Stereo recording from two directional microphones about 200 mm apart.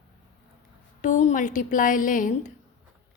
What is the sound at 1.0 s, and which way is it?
A woman's voice, 40° left (ahead or behind).